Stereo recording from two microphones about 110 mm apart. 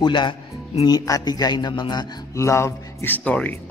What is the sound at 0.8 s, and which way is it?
A man's voice, 35° left (ahead or behind).